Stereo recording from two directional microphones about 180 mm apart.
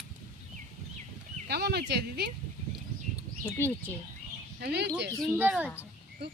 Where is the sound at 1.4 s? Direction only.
65° right (ahead or behind).